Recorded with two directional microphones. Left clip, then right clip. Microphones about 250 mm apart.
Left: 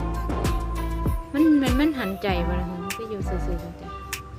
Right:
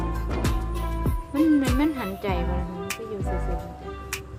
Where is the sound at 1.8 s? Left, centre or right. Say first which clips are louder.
Left 2 dB; centre.